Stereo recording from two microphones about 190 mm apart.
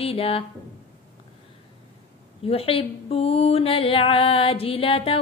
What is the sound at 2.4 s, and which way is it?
Music, 30° left (ahead or behind).